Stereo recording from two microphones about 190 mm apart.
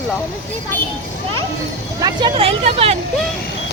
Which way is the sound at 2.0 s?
25° right (ahead or behind).